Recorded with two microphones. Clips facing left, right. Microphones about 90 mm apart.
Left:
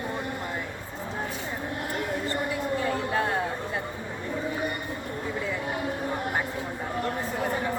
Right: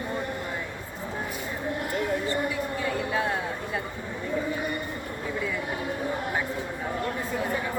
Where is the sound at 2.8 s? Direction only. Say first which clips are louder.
Right 1 dB; 45° left (ahead or behind).